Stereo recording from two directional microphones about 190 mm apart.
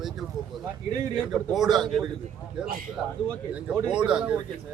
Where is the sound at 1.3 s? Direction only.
Centre (ahead or behind).